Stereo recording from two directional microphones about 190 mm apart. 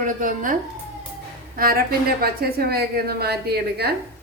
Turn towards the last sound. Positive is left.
turn(degrees=-55)  # may be behind; listen again after turning